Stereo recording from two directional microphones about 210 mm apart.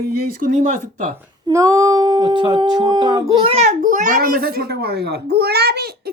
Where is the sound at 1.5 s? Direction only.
15° right (ahead or behind); by 5.8 s 50° right (ahead or behind).